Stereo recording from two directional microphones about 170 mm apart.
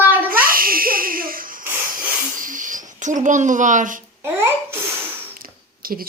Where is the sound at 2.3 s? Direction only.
50° right (ahead or behind).